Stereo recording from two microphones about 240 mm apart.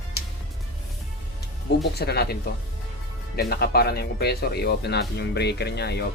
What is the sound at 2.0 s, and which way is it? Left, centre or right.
Speech, left.